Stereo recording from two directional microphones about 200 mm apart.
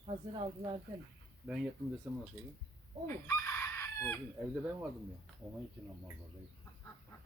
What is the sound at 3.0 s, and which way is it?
Chicken, 15° left (ahead or behind).